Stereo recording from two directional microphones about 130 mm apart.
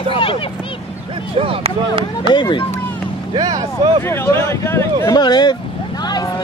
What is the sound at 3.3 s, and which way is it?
Speech, 30° right (ahead or behind).